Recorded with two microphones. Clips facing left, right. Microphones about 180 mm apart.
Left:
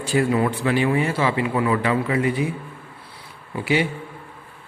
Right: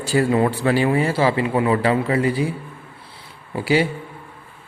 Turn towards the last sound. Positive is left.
turn(degrees=-35)  # may be behind; listen again after turning